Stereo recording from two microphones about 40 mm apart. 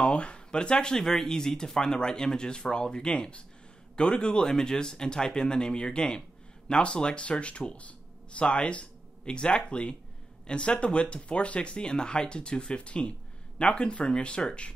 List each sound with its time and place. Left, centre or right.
0.0 s speech: left